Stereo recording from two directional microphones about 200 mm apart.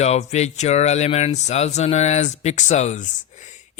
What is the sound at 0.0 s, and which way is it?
Speech, 35° left (ahead or behind).